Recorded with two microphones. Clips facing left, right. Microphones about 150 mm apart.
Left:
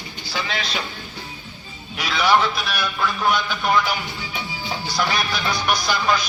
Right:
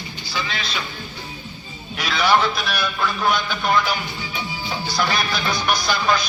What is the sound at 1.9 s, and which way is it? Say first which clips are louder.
A man's voice: even; 15° left (ahead or behind).